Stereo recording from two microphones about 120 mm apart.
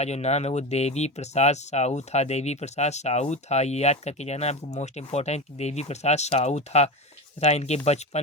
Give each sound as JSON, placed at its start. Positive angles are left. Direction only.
{"t": 0.0, "sound": "speech", "side_deg": 65}